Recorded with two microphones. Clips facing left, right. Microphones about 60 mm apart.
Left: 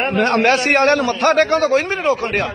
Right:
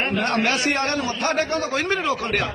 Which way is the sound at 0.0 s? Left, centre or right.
Left.